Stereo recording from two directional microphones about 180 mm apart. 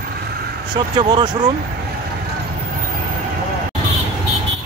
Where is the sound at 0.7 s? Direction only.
25° right (ahead or behind).